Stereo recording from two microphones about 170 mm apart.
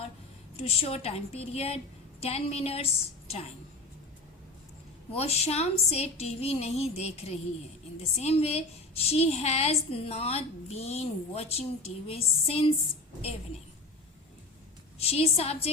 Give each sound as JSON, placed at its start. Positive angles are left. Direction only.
{"t": 0.6, "sound": "a woman's voice", "side_deg": 35}
{"t": 5.1, "sound": "a woman's voice", "side_deg": 40}
{"t": 14.9, "sound": "a woman's voice", "side_deg": 35}